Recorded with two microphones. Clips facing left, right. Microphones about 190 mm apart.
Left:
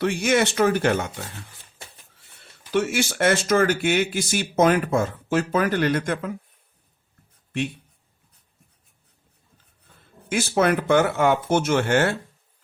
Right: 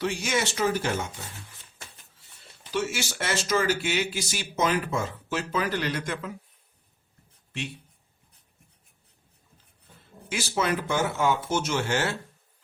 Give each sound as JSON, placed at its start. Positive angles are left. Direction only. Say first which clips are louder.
{"t": 0.0, "sound": "speech", "louder": "left 7 dB", "side_deg": 60}
{"t": 2.7, "sound": "speech", "louder": "left 7 dB", "side_deg": 55}
{"t": 10.2, "sound": "speech", "louder": "left 7 dB", "side_deg": 55}